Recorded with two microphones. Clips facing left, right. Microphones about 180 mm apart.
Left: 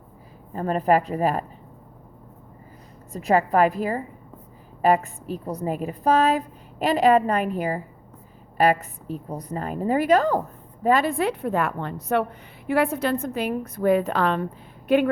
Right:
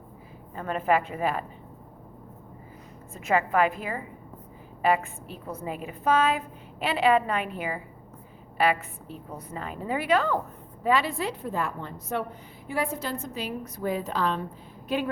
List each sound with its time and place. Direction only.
0.5 s a woman's voice: 40° left (ahead or behind)
3.1 s a woman's voice: 35° left (ahead or behind); by 15.1 s 60° left (ahead or behind)